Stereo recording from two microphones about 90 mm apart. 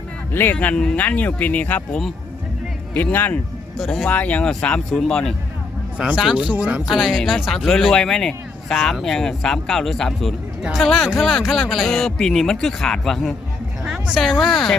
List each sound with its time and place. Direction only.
0.5 s speech: 15° left (ahead or behind)
3.8 s speech: 5° left (ahead or behind)
4.1 s speech: 15° left (ahead or behind)
6.0 s speech: 5° right (ahead or behind)
6.8 s speech: centre (ahead or behind)
13.8 s a sound: 5° right (ahead or behind)
14.4 s speech: centre (ahead or behind)